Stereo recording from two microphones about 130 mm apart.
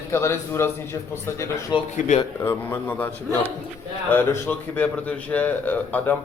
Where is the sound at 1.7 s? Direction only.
35° left (ahead or behind).